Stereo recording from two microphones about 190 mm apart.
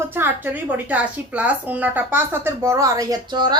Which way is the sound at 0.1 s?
10° right (ahead or behind).